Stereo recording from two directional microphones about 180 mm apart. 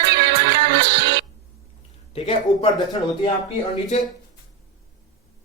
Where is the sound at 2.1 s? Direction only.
30° left (ahead or behind).